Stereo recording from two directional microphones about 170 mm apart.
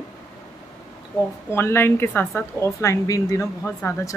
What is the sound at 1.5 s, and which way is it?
A woman's voice, 15° left (ahead or behind).